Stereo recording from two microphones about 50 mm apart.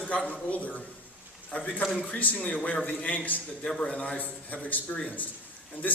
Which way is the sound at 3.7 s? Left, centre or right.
Centre.